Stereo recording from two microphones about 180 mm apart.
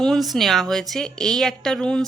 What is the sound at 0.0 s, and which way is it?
A woman's voice, centre (ahead or behind).